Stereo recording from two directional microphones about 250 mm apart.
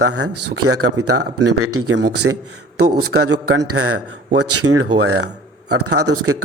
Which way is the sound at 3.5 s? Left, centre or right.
Right.